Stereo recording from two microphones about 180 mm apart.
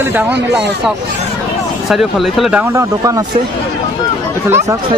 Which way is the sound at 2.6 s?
15° right (ahead or behind).